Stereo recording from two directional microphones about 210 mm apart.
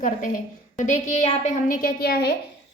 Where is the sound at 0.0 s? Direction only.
40° left (ahead or behind).